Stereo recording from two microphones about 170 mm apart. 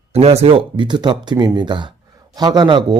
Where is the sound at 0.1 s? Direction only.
40° right (ahead or behind).